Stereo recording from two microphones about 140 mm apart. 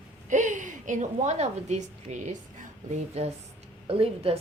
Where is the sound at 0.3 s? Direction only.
65° right (ahead or behind).